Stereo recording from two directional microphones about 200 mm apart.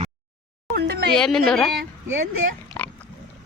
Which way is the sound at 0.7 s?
50° right (ahead or behind).